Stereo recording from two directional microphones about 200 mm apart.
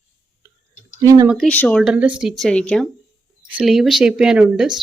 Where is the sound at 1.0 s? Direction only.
15° right (ahead or behind).